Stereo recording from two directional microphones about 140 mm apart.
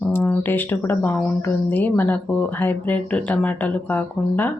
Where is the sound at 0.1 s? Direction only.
15° left (ahead or behind).